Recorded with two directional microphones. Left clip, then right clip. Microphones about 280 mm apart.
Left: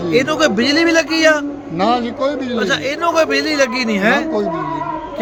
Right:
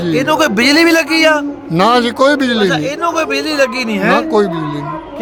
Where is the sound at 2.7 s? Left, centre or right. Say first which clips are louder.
Right 1 dB; centre.